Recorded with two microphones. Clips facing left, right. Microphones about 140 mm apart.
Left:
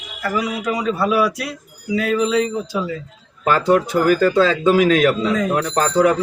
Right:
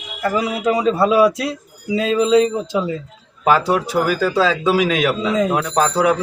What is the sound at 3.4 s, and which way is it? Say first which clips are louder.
Speech: even; 10° right (ahead or behind).